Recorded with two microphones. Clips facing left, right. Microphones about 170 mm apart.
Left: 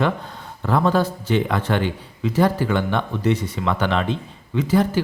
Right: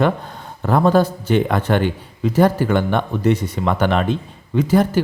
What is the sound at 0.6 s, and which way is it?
A man's voice, 45° right (ahead or behind).